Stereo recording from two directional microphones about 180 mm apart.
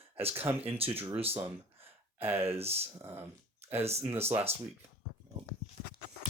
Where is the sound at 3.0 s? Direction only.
15° right (ahead or behind).